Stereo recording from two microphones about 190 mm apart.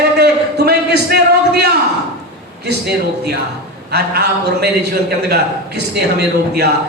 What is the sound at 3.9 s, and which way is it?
Speech, 60° right (ahead or behind).